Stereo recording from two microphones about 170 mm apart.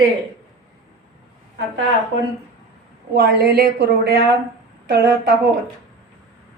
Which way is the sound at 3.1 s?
70° right (ahead or behind).